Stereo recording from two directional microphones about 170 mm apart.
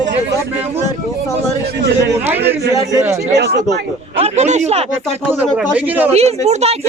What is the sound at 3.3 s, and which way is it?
Speech, 75° right (ahead or behind).